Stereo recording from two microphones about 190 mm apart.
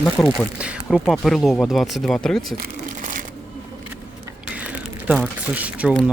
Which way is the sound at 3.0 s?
45° right (ahead or behind).